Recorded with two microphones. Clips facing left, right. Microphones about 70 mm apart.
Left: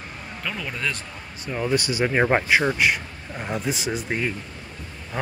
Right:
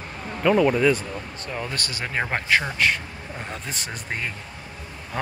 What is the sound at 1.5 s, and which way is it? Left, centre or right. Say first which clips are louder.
Speech: left 7 dB; centre.